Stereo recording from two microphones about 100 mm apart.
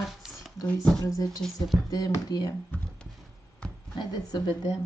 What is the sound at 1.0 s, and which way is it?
Speech, 35° left (ahead or behind).